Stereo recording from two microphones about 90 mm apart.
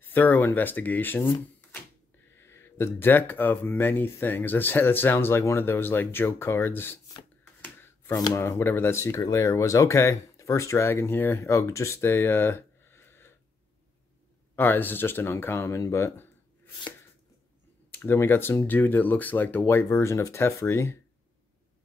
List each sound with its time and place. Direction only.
0.0 s speech: 20° left (ahead or behind)
2.3 s speech: 30° left (ahead or behind)
8.4 s speech: 25° left (ahead or behind)
14.5 s speech: 20° left (ahead or behind)
17.9 s speech: 25° left (ahead or behind)